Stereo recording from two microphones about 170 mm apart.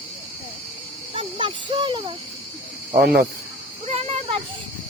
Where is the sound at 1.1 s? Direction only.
30° right (ahead or behind).